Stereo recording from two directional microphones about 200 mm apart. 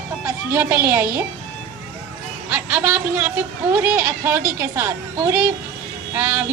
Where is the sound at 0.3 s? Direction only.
10° right (ahead or behind).